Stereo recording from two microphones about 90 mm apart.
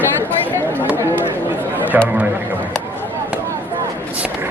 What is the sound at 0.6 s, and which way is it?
Speech, 20° right (ahead or behind).